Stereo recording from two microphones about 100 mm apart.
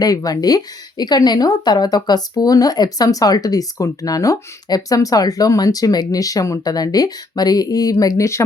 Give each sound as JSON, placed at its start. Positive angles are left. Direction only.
{"t": 0.0, "sound": "a woman's voice", "side_deg": 40}